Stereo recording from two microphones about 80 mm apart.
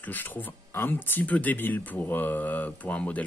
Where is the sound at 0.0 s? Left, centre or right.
Left.